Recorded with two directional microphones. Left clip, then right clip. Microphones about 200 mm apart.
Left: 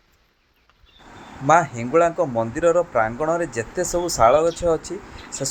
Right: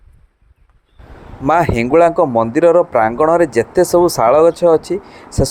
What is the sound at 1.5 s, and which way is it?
Speech, 45° right (ahead or behind).